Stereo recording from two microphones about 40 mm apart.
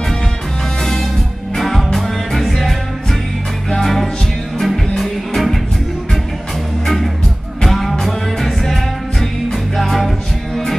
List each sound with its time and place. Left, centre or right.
1.6 s music: centre
7.6 s music: centre